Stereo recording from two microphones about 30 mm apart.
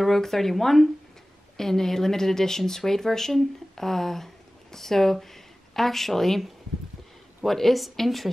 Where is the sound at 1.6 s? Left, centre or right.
Centre.